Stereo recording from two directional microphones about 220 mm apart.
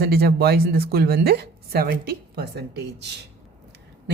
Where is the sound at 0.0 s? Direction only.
45° right (ahead or behind).